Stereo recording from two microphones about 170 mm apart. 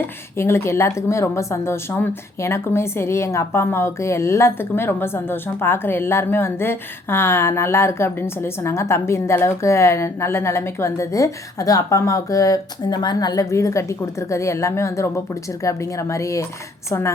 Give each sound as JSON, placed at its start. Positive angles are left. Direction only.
{"t": 0.3, "sound": "speech", "side_deg": 15}